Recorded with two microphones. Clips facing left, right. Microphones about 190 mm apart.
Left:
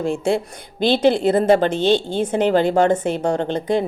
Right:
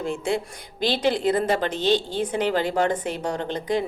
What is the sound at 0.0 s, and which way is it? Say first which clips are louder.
Speech: left 6 dB; 25° left (ahead or behind).